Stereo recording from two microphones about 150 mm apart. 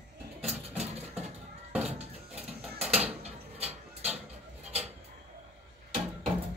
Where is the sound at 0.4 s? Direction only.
Centre (ahead or behind).